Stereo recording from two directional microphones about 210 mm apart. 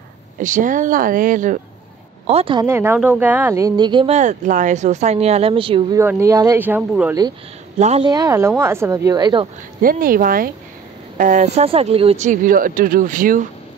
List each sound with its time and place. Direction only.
0.4 s speech: 40° right (ahead or behind)
2.2 s speech: 25° right (ahead or behind)
2.6 s speech: 10° right (ahead or behind)
5.9 s a woman's voice: 15° right (ahead or behind)
7.8 s speech: 30° right (ahead or behind)
8.1 s a woman's voice: 15° right (ahead or behind)
9.8 s speech: 45° right (ahead or behind)